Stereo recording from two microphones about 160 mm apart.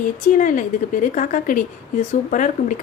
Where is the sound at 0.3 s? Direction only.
55° left (ahead or behind).